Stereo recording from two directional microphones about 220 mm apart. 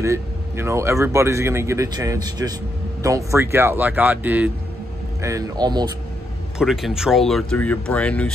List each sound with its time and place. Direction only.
0.0 s speech: 10° right (ahead or behind)
6.6 s speech: centre (ahead or behind)